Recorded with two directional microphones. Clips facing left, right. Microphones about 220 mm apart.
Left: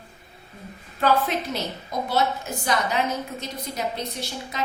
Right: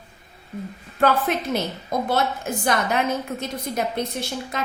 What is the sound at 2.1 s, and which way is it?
A woman's voice, 50° right (ahead or behind).